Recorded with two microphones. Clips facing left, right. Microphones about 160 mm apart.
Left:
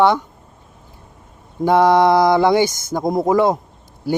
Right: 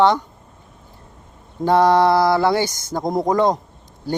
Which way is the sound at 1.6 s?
10° left (ahead or behind).